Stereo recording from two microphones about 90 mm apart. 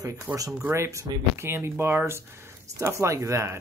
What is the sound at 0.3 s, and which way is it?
Speech, 10° right (ahead or behind).